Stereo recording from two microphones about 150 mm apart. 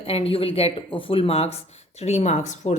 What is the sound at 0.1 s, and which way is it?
A woman's voice, 40° left (ahead or behind).